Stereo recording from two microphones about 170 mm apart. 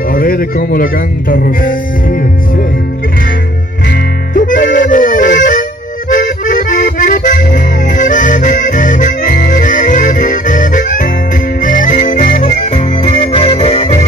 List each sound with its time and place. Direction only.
0.1 s a sound: 60° left (ahead or behind)
1.3 s music: 55° left (ahead or behind)
4.3 s music: 50° left (ahead or behind)
12.4 s music: 35° left (ahead or behind)